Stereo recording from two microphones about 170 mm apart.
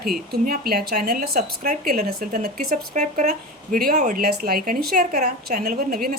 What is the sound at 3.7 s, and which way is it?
A woman's voice, 60° right (ahead or behind).